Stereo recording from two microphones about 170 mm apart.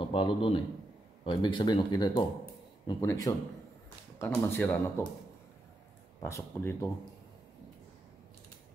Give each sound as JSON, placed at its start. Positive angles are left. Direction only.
{"t": 0.0, "sound": "a man's voice", "side_deg": 30}
{"t": 6.2, "sound": "speech", "side_deg": 15}